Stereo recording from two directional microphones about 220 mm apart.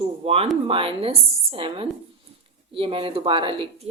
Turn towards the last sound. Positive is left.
turn(degrees=-25)  # may be behind; listen again after turning